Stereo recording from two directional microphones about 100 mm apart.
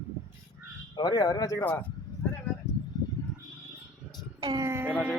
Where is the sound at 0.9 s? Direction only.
40° left (ahead or behind).